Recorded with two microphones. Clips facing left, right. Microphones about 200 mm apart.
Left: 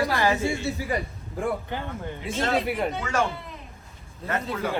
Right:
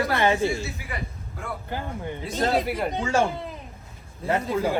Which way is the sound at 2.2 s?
40° right (ahead or behind).